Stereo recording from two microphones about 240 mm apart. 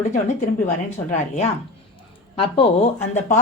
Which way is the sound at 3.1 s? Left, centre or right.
Left.